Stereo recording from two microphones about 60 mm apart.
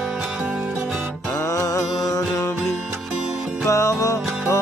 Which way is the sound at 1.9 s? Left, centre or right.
Left.